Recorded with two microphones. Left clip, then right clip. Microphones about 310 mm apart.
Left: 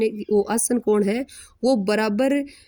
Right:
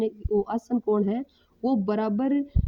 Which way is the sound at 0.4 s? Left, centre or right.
Right.